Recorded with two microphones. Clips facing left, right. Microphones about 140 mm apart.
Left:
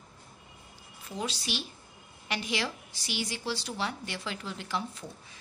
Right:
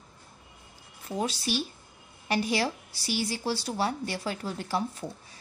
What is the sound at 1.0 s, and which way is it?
Speech, 40° right (ahead or behind).